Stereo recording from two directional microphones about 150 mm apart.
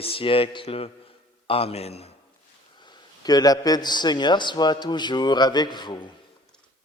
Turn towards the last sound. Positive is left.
turn(degrees=30)  # may be behind; listen again after turning